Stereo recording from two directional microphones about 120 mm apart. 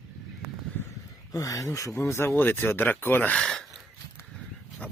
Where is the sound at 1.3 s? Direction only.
30° left (ahead or behind).